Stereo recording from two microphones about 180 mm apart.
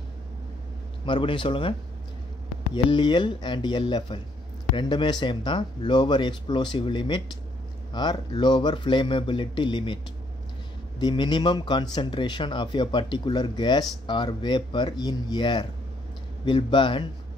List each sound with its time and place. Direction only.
1.0 s speech: 30° left (ahead or behind)
11.0 s speech: 25° left (ahead or behind)